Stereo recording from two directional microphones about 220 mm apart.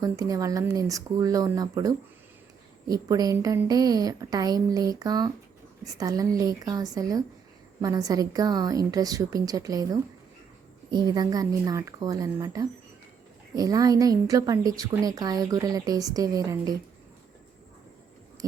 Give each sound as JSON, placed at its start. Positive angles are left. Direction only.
{"t": 0.0, "sound": "a woman's voice", "side_deg": -15}